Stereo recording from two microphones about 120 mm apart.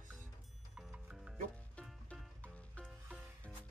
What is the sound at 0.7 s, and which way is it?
Music, 5° right (ahead or behind).